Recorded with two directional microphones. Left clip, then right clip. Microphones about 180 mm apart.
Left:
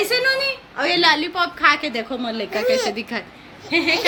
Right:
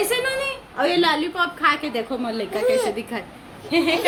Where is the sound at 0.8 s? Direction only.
5° left (ahead or behind).